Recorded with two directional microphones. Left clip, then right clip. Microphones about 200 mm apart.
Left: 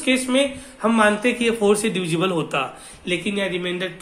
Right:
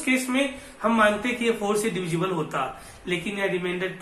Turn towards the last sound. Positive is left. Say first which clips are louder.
# left 2 dB
turn(degrees=50)  # may be behind; listen again after turning